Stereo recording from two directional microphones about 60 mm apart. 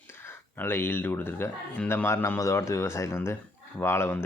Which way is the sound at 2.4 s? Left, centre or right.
Left.